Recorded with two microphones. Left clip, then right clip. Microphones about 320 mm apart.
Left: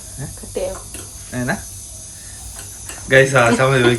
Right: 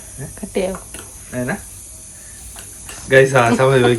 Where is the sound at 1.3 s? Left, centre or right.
Centre.